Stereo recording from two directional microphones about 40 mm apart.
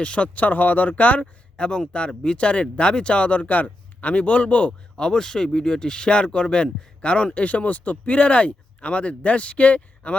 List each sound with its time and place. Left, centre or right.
0.0 s speech: left
1.5 s a man's voice: left
5.0 s speech: centre; by 10.2 s left